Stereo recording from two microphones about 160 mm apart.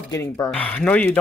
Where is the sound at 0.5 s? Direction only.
10° left (ahead or behind).